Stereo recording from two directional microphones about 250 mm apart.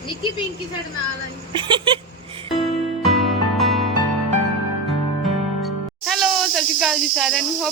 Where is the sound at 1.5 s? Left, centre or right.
Centre.